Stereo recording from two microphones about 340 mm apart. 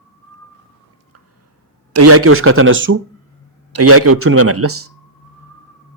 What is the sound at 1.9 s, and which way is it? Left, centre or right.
A man's voice, right.